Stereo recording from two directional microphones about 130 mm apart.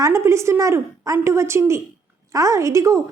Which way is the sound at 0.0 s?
20° right (ahead or behind).